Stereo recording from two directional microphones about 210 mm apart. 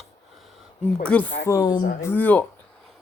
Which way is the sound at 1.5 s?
15° left (ahead or behind).